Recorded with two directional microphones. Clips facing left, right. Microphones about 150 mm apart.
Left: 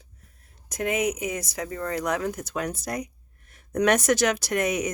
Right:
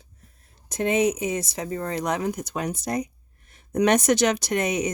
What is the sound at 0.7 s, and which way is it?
Speech, 25° right (ahead or behind).